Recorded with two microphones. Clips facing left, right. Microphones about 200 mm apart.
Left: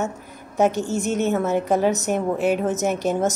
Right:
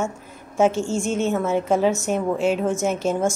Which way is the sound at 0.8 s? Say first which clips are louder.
Even; 20° left (ahead or behind).